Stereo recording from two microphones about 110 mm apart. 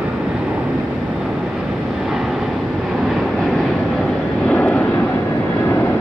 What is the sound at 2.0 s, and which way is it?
Vehicle, 5° right (ahead or behind).